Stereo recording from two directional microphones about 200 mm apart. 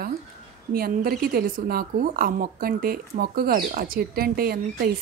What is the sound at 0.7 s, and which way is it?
A woman's voice, 50° right (ahead or behind).